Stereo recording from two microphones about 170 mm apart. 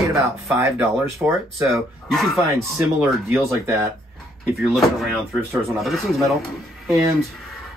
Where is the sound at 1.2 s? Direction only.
10° right (ahead or behind).